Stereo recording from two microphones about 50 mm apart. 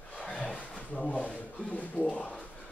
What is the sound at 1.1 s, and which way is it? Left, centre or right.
Speech, left.